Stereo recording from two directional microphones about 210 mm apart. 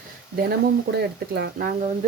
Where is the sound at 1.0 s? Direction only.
50° right (ahead or behind).